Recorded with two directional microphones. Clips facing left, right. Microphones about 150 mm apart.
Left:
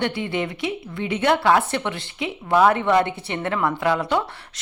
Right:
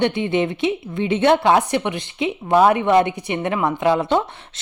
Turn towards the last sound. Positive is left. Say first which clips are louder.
# right 3 dB
turn(degrees=-20)  # may be behind; listen again after turning